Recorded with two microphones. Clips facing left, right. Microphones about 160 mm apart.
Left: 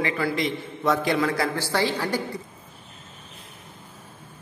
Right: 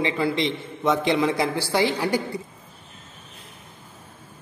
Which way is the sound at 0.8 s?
20° right (ahead or behind).